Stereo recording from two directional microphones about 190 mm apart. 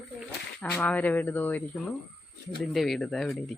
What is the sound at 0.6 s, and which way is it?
Speech, 10° left (ahead or behind).